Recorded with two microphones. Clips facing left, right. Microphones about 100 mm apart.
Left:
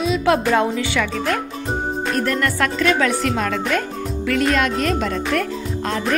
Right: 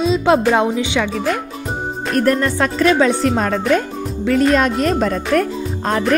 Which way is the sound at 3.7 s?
25° right (ahead or behind).